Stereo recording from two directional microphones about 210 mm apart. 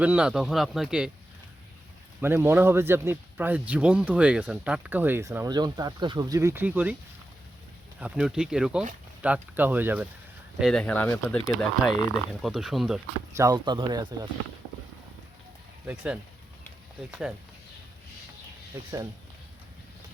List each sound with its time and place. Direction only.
0.0 s speech: 5° right (ahead or behind)
2.2 s speech: 10° right (ahead or behind)
7.9 s speech: 5° right (ahead or behind)
10.6 s speech: 5° left (ahead or behind)
13.3 s speech: 15° right (ahead or behind)